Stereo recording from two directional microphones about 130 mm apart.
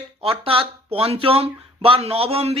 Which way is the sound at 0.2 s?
45° right (ahead or behind).